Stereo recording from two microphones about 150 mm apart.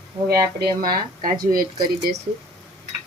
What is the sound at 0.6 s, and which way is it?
Speech, 80° right.